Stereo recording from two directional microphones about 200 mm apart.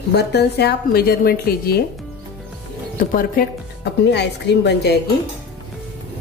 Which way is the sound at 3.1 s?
45° left (ahead or behind).